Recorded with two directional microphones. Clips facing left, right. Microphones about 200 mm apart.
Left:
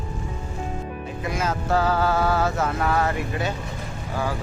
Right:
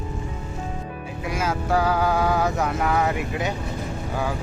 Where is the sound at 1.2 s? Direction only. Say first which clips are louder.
Right 1 dB; 10° right (ahead or behind).